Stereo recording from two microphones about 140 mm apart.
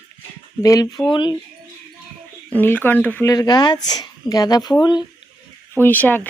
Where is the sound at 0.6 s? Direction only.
25° left (ahead or behind).